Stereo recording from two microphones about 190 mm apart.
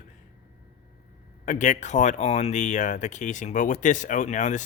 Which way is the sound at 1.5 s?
40° left (ahead or behind).